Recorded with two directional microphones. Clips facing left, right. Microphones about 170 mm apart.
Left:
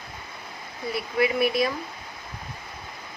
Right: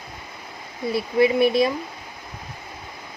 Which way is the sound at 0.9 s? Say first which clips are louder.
Right 6 dB; 25° right (ahead or behind).